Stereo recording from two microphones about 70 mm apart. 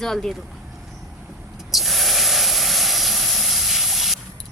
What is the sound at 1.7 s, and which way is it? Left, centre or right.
Vehicle, centre.